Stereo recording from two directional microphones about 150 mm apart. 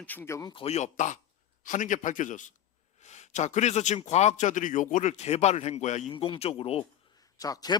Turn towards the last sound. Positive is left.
turn(degrees=25)  # may be behind; listen again after turning